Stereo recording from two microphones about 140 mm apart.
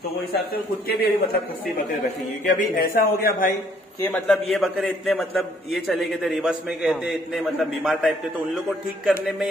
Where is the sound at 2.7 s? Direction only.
90° left.